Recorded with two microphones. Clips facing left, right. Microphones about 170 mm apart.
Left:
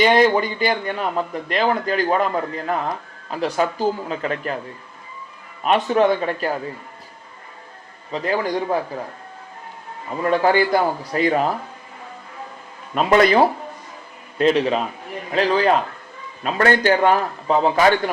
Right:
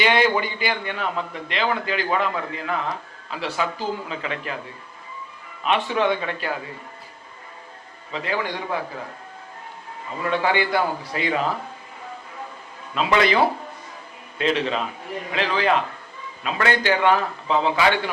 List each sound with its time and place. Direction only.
0.0 s a man's voice: 40° left (ahead or behind)
5.6 s a man's voice: 40° left (ahead or behind)
8.1 s a man's voice: 40° left (ahead or behind)
10.2 s a man's voice: 40° left (ahead or behind)
12.9 s a man's voice: 45° left (ahead or behind)